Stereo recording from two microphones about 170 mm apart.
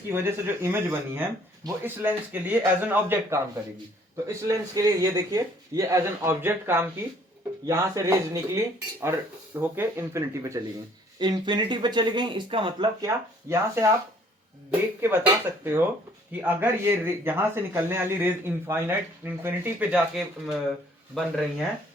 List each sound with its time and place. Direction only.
0.1 s a man's voice: 15° right (ahead or behind)
11.2 s speech: 25° right (ahead or behind)
13.5 s a man's voice: 15° right (ahead or behind)
20.1 s speech: centre (ahead or behind)